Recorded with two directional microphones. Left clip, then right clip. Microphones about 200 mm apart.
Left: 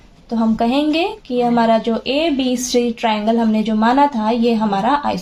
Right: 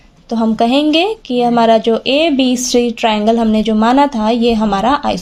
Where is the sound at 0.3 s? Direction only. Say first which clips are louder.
Right 4 dB; 45° right (ahead or behind).